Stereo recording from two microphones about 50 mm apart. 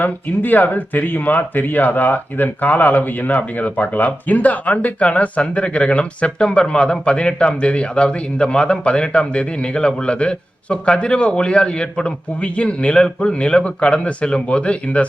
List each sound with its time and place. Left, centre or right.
0.0 s speech: left